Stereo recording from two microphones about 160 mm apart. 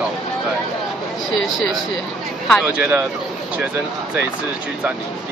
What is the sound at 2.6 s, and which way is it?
Speech, 10° right (ahead or behind).